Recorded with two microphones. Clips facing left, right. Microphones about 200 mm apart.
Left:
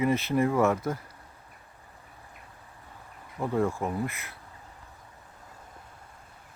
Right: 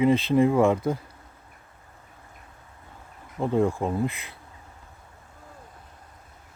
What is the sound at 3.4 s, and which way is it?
Speech, 15° right (ahead or behind).